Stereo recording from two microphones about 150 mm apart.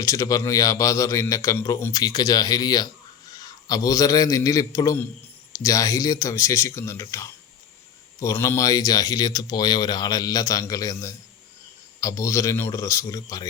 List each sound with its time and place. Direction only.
0.0 s a man's voice: 20° left (ahead or behind)